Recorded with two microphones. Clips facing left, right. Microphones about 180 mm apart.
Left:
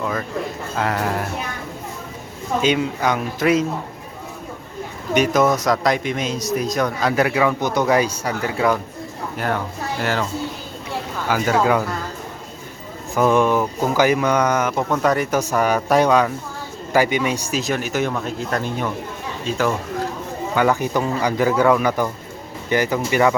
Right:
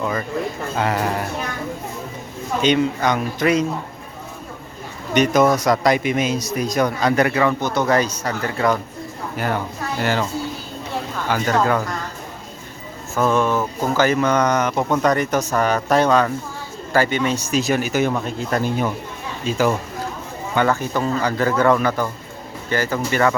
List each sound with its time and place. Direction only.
0.0 s a sound: centre (ahead or behind)
0.8 s speech: centre (ahead or behind)
2.6 s speech: 5° left (ahead or behind)
5.1 s speech: 5° left (ahead or behind)
10.0 s speech: centre (ahead or behind)
11.3 s speech: 5° left (ahead or behind)
13.1 s speech: 15° left (ahead or behind)
17.6 s speech: 5° right (ahead or behind)
20.6 s speech: 15° left (ahead or behind)